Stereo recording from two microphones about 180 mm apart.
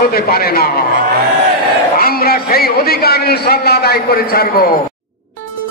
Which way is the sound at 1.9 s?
55° left (ahead or behind).